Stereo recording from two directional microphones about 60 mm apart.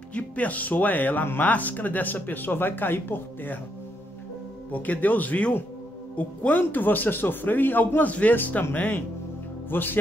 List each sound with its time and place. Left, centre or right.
0.1 s speech: left
4.7 s speech: left